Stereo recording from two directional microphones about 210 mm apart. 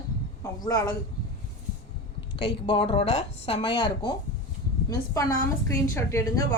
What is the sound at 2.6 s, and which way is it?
A woman's voice, 25° left (ahead or behind).